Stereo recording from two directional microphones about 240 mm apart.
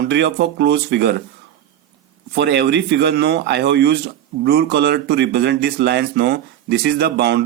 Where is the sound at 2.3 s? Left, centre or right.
Right.